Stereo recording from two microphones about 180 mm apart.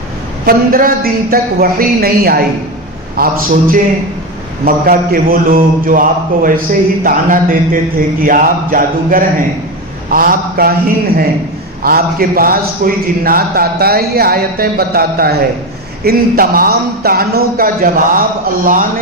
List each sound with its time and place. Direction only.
0.4 s a man's voice: 50° right (ahead or behind)